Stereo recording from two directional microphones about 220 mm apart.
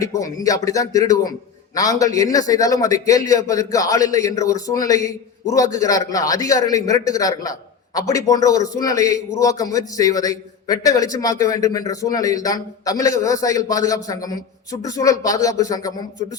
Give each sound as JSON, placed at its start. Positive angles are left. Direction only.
{"t": 0.0, "sound": "a man's voice", "side_deg": 15}